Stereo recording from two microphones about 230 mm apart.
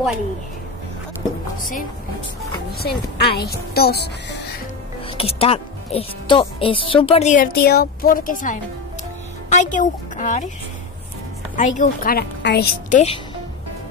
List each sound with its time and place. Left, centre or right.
1.6 s a woman's voice: left
5.0 s a woman's voice: left
11.5 s a woman's voice: left